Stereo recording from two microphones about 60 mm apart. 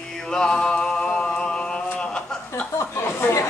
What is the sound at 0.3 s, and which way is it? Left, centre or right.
Music, centre.